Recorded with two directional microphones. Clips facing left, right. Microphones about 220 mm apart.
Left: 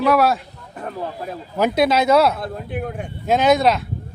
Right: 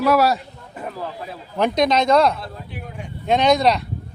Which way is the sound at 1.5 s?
5° left (ahead or behind).